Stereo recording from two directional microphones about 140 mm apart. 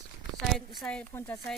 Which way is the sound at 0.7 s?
5° left (ahead or behind).